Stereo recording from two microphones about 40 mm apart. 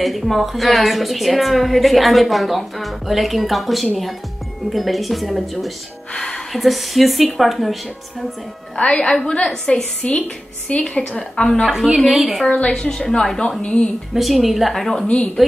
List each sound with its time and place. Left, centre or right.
0.0 s a woman's voice: centre
6.1 s music: centre
6.5 s a woman's voice: centre
8.7 s a woman's voice: left
9.0 s a woman's voice: centre
10.0 s a woman's voice: left
11.7 s a woman's voice: centre
12.1 s a woman's voice: centre
12.7 s a woman's voice: centre
14.1 s a woman's voice: centre